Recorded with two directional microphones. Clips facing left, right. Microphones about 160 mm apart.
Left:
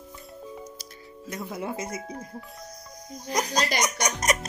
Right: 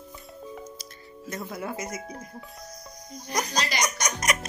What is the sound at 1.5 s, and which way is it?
Speech, 20° left (ahead or behind).